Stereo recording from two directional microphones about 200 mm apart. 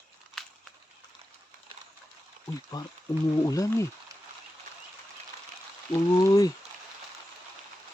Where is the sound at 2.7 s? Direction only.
20° left (ahead or behind).